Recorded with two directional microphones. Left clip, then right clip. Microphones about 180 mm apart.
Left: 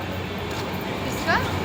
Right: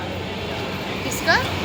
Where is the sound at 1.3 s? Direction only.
65° right (ahead or behind).